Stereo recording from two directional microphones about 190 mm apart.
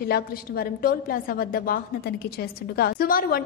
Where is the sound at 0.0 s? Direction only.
55° left (ahead or behind).